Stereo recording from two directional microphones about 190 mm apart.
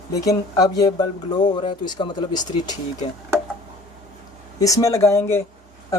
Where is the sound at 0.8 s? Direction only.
20° left (ahead or behind).